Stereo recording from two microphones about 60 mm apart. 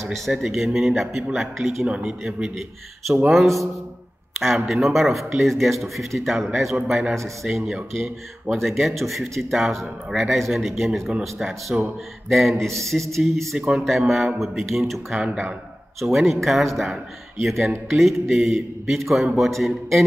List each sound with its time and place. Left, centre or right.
0.1 s speech: centre
3.3 s speech: centre
12.6 s speech: right
13.1 s speech: centre
13.6 s speech: centre
13.8 s speech: centre